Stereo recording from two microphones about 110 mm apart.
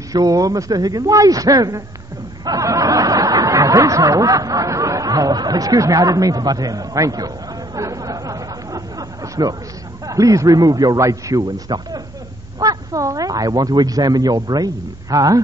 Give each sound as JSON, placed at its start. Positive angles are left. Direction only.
{"t": 0.1, "sound": "speech", "side_deg": -30}
{"t": 7.7, "sound": "a sound", "side_deg": -30}
{"t": 10.0, "sound": "speech", "side_deg": -30}